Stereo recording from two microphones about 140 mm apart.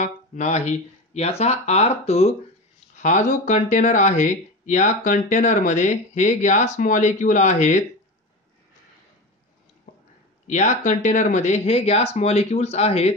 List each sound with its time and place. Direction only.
0.0 s speech: 60° left (ahead or behind)
3.0 s speech: 60° left (ahead or behind)
9.9 s a sound: 70° left (ahead or behind)
10.4 s speech: 60° left (ahead or behind)